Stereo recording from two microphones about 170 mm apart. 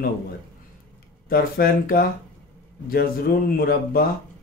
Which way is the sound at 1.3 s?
60° left (ahead or behind).